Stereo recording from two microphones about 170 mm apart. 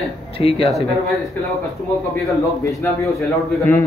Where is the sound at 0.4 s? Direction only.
30° left (ahead or behind).